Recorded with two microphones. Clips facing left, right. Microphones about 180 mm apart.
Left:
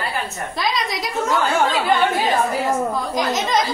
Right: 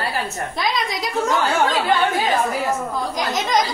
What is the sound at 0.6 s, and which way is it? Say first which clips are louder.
Speech: left 1 dB; centre (ahead or behind).